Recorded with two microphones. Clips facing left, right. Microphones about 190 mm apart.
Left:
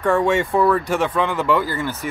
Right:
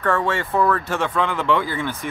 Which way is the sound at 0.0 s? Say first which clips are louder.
Left 4 dB; 15° left (ahead or behind).